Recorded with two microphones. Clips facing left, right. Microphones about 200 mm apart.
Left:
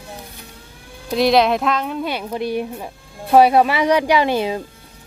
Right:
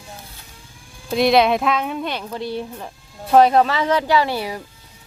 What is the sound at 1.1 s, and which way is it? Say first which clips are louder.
Speech: even; centre (ahead or behind).